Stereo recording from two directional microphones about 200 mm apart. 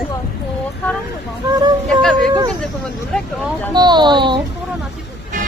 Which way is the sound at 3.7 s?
20° right (ahead or behind).